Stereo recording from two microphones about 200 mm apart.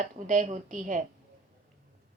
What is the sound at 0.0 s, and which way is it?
A woman's voice, 40° right (ahead or behind).